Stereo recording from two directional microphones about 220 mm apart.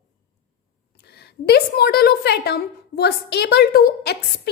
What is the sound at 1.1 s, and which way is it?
A woman's voice, 45° left (ahead or behind).